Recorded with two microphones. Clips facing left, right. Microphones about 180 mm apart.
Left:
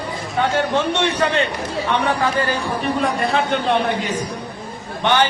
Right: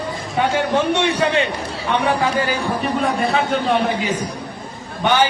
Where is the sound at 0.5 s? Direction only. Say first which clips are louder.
Right 2 dB; 10° right (ahead or behind).